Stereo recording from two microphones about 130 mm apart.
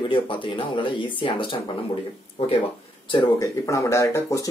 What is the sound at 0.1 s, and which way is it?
Speech, 40° left (ahead or behind).